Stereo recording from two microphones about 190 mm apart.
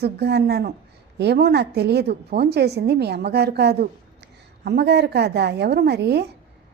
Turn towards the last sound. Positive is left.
turn(degrees=-60)  # may be behind; listen again after turning